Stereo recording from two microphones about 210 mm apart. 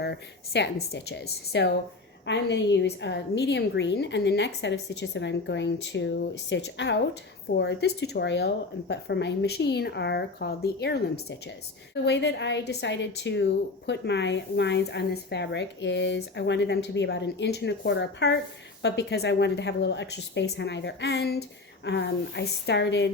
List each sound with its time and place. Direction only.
0.0 s a woman's voice: 55° left (ahead or behind)